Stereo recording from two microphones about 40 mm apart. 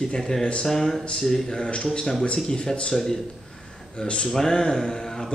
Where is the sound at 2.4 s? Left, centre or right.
Left.